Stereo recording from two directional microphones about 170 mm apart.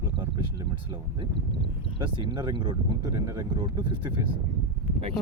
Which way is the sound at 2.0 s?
30° right (ahead or behind).